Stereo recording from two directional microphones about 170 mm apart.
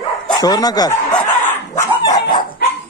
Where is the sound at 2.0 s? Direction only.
25° left (ahead or behind).